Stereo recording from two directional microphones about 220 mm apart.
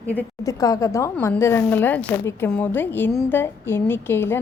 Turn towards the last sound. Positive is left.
turn(degrees=10)  # may be behind; listen again after turning